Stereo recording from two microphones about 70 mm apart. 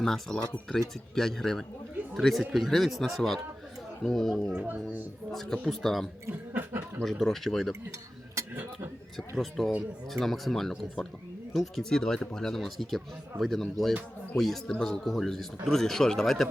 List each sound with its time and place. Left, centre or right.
0.0 s speech: centre
4.5 s speech: right
5.3 s speech: centre
6.5 s chuckle: right
7.0 s speech: centre
9.1 s speech: centre